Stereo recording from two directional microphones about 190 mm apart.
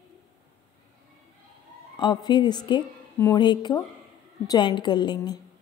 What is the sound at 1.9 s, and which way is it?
A woman's voice, 25° left (ahead or behind).